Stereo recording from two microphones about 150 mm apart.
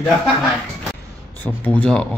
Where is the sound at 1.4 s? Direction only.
10° left (ahead or behind).